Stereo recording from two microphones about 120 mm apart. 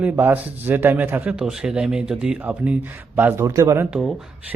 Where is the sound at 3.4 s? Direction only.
30° right (ahead or behind).